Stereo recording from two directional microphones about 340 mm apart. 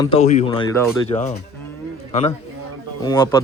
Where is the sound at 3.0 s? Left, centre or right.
Centre.